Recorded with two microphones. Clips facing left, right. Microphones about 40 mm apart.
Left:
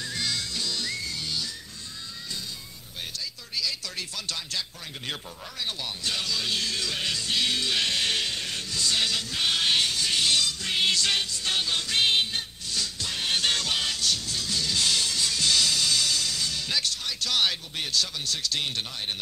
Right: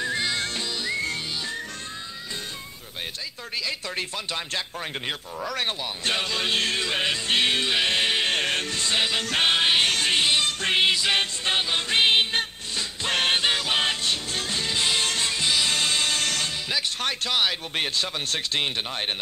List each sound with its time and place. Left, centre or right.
0.0 s music: right
0.4 s whistling: right
0.7 s whistling: right
0.9 s whistling: right
3.5 s music: right
8.3 s music: right
9.8 s music: right
10.9 s music: right
13.3 s music: right
13.7 s music: right
16.6 s music: centre
17.3 s speech: centre
17.7 s music: right